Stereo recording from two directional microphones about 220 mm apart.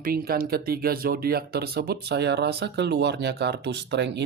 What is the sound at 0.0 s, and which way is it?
Speech, 40° right (ahead or behind).